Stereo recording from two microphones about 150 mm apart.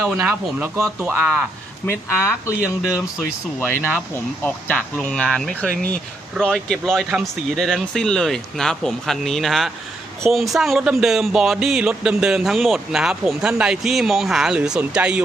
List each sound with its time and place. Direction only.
0.2 s speech: 10° right (ahead or behind)
1.9 s speech: 15° left (ahead or behind)
4.1 s speech: 10° left (ahead or behind); by 15.2 s 5° right (ahead or behind)